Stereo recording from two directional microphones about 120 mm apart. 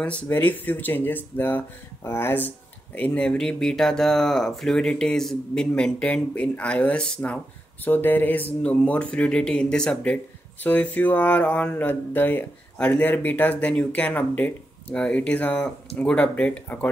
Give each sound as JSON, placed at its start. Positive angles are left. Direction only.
{"t": 0.0, "sound": "speech", "side_deg": 10}